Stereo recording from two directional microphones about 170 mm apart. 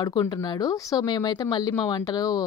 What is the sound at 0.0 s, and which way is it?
Speech, 25° left (ahead or behind).